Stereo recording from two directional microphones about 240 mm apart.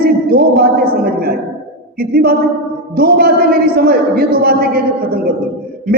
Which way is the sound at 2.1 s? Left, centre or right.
Right.